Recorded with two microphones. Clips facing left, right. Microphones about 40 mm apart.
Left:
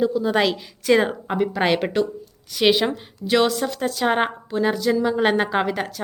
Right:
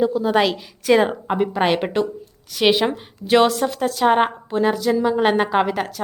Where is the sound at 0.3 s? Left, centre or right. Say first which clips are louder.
Right 2 dB; centre.